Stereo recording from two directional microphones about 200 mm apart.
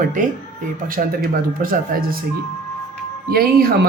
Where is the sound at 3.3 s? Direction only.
50° right (ahead or behind).